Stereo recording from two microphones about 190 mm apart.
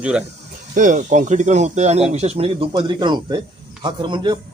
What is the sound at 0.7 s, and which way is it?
A man's voice, 40° right (ahead or behind).